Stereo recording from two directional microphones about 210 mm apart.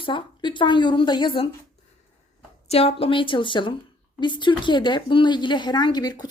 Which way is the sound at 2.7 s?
30° left (ahead or behind).